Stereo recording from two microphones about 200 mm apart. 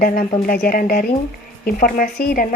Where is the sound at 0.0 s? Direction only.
40° left (ahead or behind).